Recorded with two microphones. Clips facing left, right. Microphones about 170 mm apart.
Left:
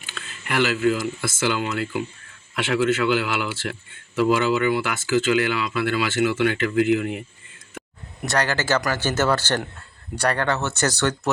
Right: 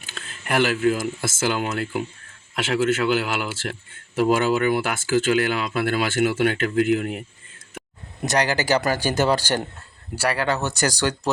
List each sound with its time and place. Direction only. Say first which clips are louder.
0.0 s speech: right 1 dB; 40° right (ahead or behind)
8.2 s speech: right 2 dB; 15° right (ahead or behind)